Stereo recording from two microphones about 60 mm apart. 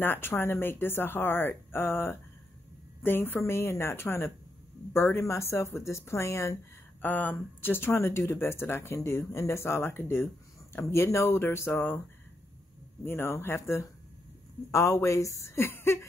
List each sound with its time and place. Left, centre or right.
0.0 s a woman's voice: left
5.2 s speech: left
7.0 s speech: left
13.0 s speech: left